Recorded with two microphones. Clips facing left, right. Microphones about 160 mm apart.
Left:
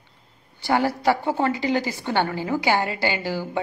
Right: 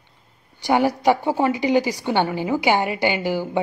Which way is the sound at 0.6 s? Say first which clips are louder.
Right 3 dB; 15° right (ahead or behind).